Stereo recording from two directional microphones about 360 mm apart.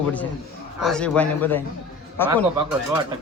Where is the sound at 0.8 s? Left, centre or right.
Centre.